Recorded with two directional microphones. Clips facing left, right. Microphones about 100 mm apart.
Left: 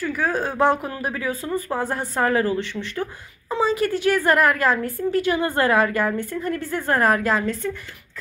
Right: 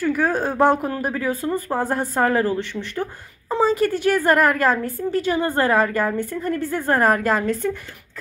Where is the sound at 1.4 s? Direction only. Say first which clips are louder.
Right 2 dB; 25° right (ahead or behind).